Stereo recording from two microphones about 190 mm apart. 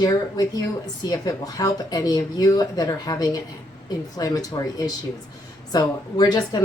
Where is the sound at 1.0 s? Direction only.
20° left (ahead or behind).